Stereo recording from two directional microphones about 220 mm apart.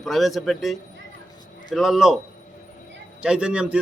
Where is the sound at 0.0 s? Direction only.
Centre (ahead or behind).